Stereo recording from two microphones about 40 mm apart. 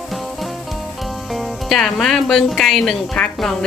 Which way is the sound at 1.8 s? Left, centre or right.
Centre.